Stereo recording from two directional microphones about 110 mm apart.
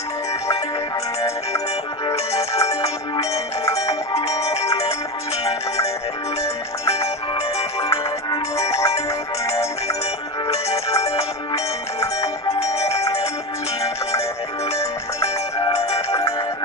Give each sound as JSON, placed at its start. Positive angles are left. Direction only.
{"t": 2.1, "sound": "music", "side_deg": 70}
{"t": 3.8, "sound": "music", "side_deg": 70}
{"t": 6.4, "sound": "music", "side_deg": 70}
{"t": 8.3, "sound": "music", "side_deg": 25}
{"t": 10.5, "sound": "music", "side_deg": 70}
{"t": 11.5, "sound": "music", "side_deg": 30}
{"t": 12.5, "sound": "music", "side_deg": 70}
{"t": 13.8, "sound": "music", "side_deg": 30}
{"t": 15.6, "sound": "music", "side_deg": 60}
{"t": 16.0, "sound": "music", "side_deg": 30}